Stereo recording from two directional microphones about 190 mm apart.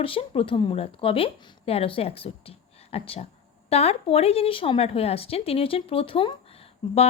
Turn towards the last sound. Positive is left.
turn(degrees=30)  # may be behind; listen again after turning